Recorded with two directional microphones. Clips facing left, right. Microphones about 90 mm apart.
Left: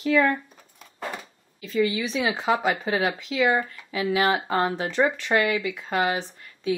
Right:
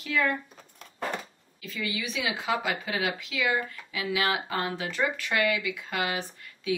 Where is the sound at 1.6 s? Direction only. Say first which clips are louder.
Left 10 dB; 35° left (ahead or behind).